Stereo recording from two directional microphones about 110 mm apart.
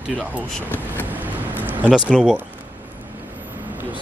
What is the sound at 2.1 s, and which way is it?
Speech, 5° right (ahead or behind).